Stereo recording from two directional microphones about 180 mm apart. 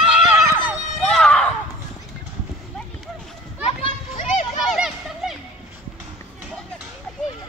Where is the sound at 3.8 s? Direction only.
40° left (ahead or behind).